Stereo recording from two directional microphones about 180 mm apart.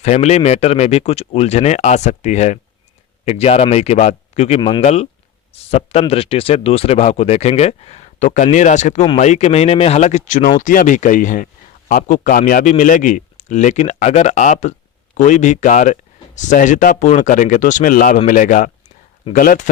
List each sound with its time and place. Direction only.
0.0 s a man's voice: 40° left (ahead or behind)